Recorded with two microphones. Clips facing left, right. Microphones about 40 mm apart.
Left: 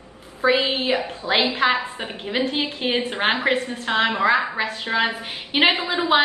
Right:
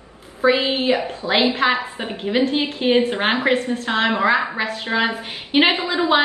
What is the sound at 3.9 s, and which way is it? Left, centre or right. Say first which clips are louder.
Speech: even; right.